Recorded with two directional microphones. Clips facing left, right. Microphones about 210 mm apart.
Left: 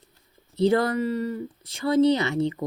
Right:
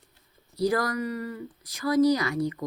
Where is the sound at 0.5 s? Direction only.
25° left (ahead or behind).